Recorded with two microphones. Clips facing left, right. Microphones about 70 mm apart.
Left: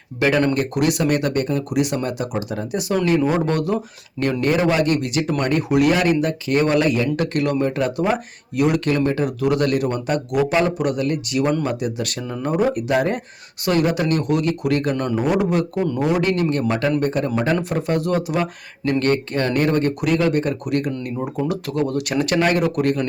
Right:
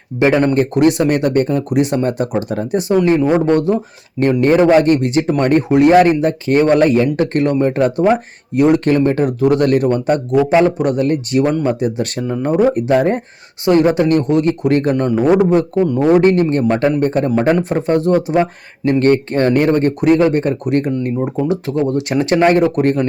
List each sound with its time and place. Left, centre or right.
0.2 s speech: right
2.9 s speech: right
10.5 s speech: right